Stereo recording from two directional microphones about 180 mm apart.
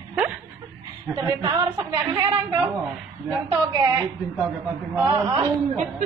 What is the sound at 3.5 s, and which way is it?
Speech, 20° right (ahead or behind).